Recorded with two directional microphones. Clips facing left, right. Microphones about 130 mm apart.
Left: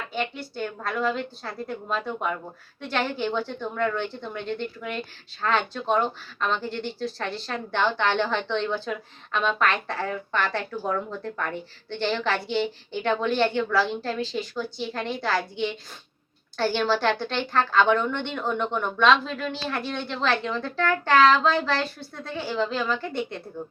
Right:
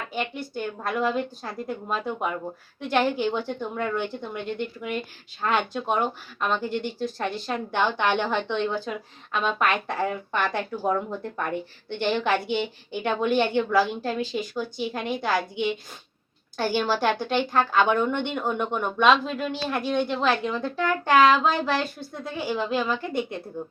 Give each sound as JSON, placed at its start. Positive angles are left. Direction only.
{"t": 0.5, "sound": "a woman's voice", "side_deg": -20}